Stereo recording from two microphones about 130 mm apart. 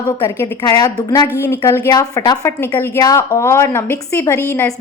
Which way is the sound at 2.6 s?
15° left (ahead or behind).